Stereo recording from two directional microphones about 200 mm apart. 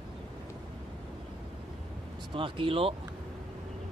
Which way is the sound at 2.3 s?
25° right (ahead or behind).